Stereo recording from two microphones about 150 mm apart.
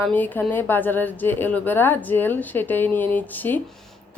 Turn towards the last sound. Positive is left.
turn(degrees=10)  # may be behind; listen again after turning